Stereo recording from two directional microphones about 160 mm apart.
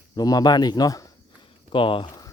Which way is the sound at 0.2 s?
25° left (ahead or behind).